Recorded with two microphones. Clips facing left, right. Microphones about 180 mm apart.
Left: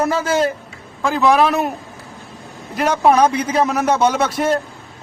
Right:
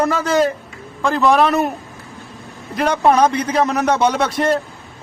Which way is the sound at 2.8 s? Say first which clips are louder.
Even; 5° left (ahead or behind).